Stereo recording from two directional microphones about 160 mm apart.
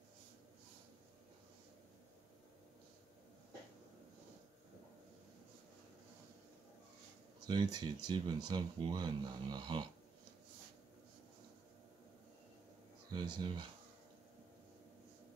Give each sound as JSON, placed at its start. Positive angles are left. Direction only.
{"t": 7.4, "sound": "speech", "side_deg": -25}
{"t": 13.1, "sound": "speech", "side_deg": -30}